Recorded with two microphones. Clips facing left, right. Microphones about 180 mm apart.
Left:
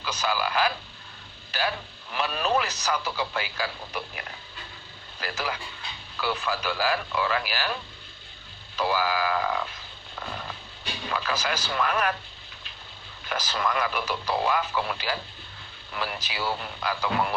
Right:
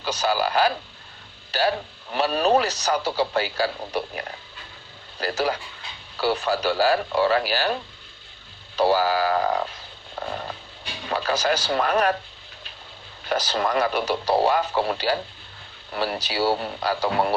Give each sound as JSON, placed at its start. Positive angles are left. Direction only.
{"t": 0.0, "sound": "speech", "side_deg": -35}
{"t": 10.2, "sound": "a sound", "side_deg": -40}
{"t": 11.1, "sound": "speech", "side_deg": -35}
{"t": 13.2, "sound": "speech", "side_deg": -35}